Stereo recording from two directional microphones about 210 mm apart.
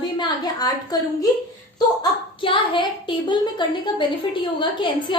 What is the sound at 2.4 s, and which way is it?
A woman's voice, 25° left (ahead or behind).